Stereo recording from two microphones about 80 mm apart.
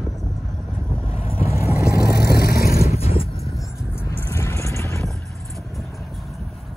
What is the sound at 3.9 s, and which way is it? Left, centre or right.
Vehicle, left.